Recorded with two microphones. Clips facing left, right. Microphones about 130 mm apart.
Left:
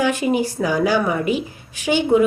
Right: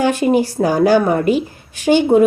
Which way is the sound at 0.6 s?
45° right (ahead or behind).